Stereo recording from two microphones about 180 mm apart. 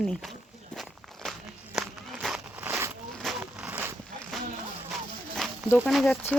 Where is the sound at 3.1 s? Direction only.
Centre (ahead or behind).